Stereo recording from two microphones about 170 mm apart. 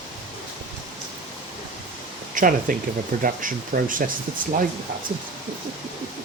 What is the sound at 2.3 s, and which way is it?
Speech, 55° right (ahead or behind).